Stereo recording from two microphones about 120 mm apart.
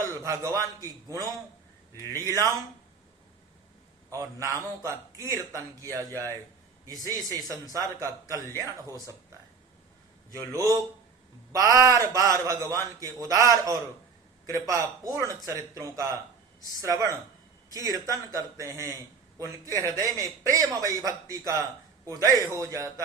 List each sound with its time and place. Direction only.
0.0 s a man's voice: 30° right (ahead or behind)
2.1 s a man's voice: 25° right (ahead or behind)
4.1 s a man's voice: 25° right (ahead or behind)